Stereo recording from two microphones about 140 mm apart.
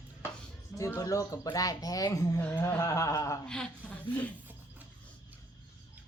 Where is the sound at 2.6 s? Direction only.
20° left (ahead or behind).